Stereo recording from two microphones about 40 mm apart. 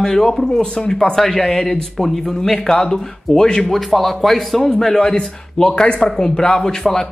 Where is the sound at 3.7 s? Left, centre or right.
Centre.